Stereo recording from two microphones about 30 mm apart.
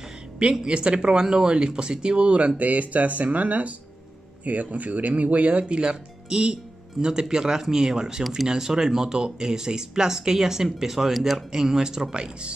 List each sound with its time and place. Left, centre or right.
0.4 s speech: right
1.2 s speech: right
6.2 s speech: right